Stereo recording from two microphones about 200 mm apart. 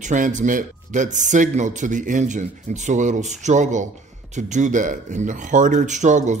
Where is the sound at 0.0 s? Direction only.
40° right (ahead or behind).